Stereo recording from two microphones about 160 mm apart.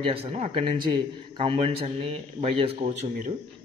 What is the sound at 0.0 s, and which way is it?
A man's voice, 35° right (ahead or behind).